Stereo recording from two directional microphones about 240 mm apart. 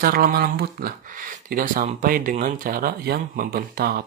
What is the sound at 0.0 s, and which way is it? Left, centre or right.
Speech, right.